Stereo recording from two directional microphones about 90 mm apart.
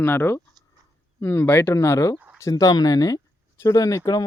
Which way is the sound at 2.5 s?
45° left (ahead or behind).